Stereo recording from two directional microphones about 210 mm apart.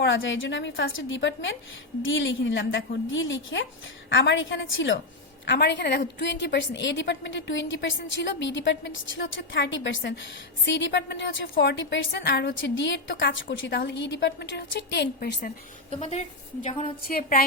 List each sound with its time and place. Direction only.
0.0 s a woman's voice: 60° left (ahead or behind)
15.9 s a woman's voice: 30° left (ahead or behind)